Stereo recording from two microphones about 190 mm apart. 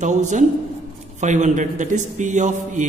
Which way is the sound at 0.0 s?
40° right (ahead or behind).